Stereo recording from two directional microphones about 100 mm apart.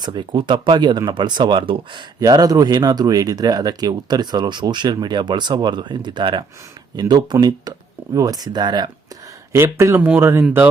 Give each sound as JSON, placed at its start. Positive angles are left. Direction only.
{"t": 0.0, "sound": "speech", "side_deg": -50}
{"t": 2.1, "sound": "speech", "side_deg": -40}
{"t": 9.5, "sound": "speech", "side_deg": -25}